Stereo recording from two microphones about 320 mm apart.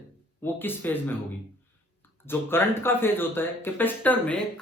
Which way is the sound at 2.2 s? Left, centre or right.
Centre.